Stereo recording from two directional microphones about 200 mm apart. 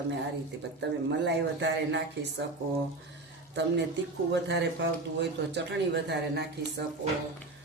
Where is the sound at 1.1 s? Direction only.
60° right (ahead or behind).